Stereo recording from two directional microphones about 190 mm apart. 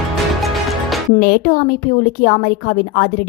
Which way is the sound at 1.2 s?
50° left (ahead or behind).